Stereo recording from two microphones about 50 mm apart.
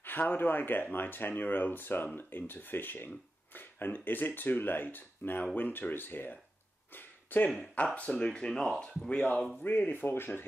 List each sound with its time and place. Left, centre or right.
0.0 s speech: left
6.9 s a sound: left
7.8 s speech: left
9.1 s speech: left